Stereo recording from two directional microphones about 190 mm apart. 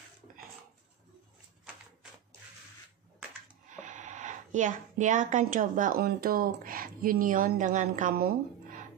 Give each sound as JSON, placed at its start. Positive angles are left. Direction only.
{"t": 3.7, "sound": "speech", "side_deg": -40}